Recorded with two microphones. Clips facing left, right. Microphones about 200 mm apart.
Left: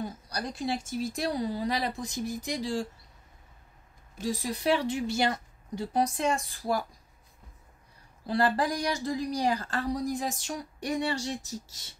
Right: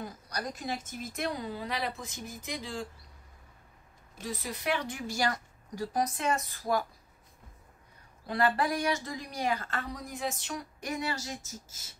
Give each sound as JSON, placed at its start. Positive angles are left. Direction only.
{"t": 0.0, "sound": "a woman's voice", "side_deg": 30}
{"t": 4.2, "sound": "a woman's voice", "side_deg": 30}
{"t": 8.3, "sound": "a woman's voice", "side_deg": 30}